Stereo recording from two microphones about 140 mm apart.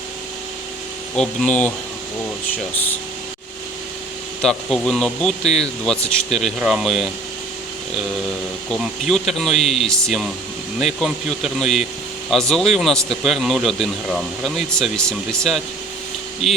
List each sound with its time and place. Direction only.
1.1 s speech: 5° left (ahead or behind)
4.4 s speech: 5° left (ahead or behind)
8.7 s speech: centre (ahead or behind)
16.4 s speech: 50° left (ahead or behind)